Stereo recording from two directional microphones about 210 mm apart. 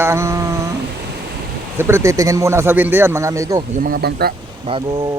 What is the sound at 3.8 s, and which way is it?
Speech, 45° right (ahead or behind).